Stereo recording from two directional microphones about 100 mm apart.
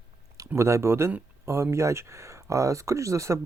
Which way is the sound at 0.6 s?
30° right (ahead or behind).